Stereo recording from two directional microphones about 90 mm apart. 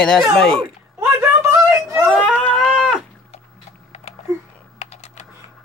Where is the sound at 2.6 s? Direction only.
10° right (ahead or behind).